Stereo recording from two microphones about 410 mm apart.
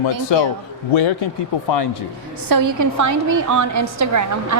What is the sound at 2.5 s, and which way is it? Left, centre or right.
A woman's voice, right.